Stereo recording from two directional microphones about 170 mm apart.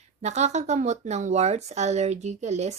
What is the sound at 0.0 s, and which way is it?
Speech, 40° right (ahead or behind).